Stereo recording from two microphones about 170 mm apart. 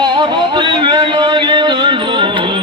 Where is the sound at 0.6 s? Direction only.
30° right (ahead or behind).